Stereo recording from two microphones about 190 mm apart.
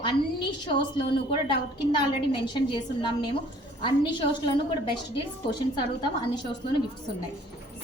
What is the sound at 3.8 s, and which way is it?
Speech, 25° left (ahead or behind).